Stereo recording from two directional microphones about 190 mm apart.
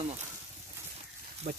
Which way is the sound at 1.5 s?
50° right (ahead or behind).